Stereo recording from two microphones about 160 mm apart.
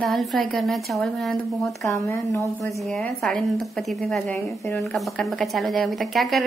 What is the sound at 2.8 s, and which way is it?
Speech, 5° left (ahead or behind).